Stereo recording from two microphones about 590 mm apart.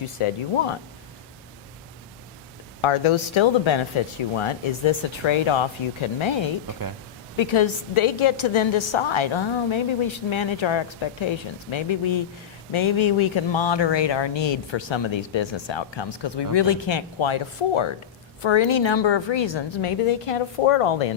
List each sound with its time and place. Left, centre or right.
0.2 s speech: left
2.8 s speech: left